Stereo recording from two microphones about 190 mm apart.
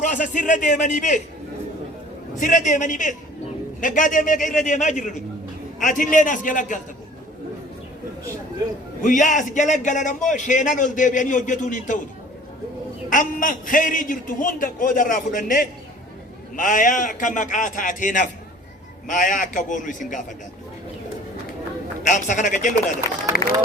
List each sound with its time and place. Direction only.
0.0 s a man's voice: 40° left (ahead or behind)
2.4 s a man's voice: 40° left (ahead or behind)
9.0 s a man's voice: 40° left (ahead or behind)
13.1 s a man's voice: 45° left (ahead or behind)
22.0 s a man's voice: 40° left (ahead or behind)
23.4 s speech: 20° left (ahead or behind)